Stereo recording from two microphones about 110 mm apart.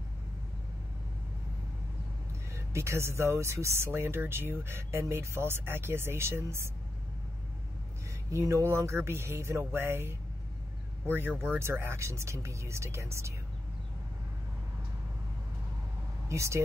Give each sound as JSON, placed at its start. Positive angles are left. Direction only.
{"t": 2.5, "sound": "speech", "side_deg": -25}
{"t": 8.3, "sound": "speech", "side_deg": -25}
{"t": 16.3, "sound": "speech", "side_deg": -25}